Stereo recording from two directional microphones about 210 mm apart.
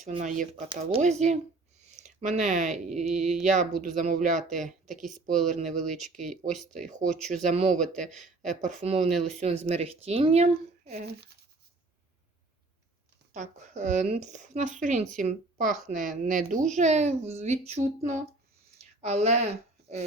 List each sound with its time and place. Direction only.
0.2 s speech: 35° right (ahead or behind)
0.7 s speech: 25° right (ahead or behind)
5.8 s speech: centre (ahead or behind)
6.8 s speech: 35° right (ahead or behind)
10.9 s speech: 50° right (ahead or behind)
13.3 s speech: 35° right (ahead or behind)